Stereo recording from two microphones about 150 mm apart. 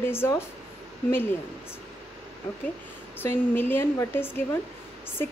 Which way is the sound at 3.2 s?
15° left (ahead or behind).